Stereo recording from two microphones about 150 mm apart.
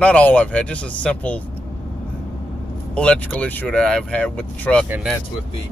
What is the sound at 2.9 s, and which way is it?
Speech, 10° left (ahead or behind).